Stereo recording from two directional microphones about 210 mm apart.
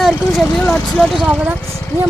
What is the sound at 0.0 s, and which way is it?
Speech, centre (ahead or behind).